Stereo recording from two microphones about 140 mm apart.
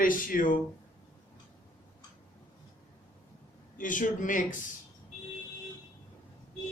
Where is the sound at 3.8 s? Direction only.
70° left (ahead or behind).